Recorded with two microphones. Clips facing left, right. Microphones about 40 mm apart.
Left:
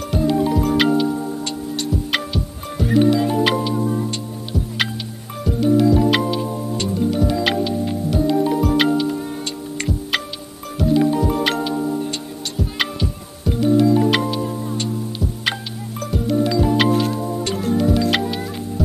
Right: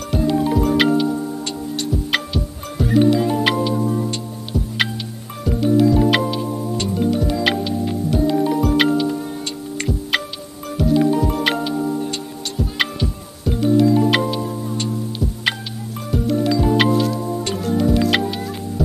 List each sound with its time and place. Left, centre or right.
0.1 s music: centre
16.1 s music: centre
16.9 s music: left
17.2 s music: centre